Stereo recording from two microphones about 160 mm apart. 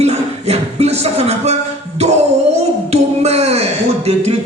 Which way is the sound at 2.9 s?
40° right (ahead or behind).